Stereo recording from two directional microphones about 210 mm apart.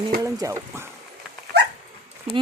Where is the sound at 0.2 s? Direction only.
15° right (ahead or behind).